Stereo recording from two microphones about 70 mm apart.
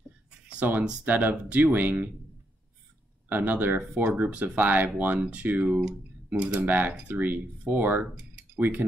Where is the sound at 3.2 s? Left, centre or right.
Right.